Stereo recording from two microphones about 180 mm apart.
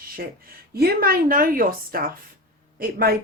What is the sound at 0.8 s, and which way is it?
A woman's voice, 55° right (ahead or behind).